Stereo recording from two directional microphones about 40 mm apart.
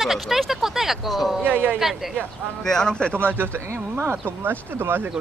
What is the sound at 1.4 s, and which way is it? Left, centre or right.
Speech, right.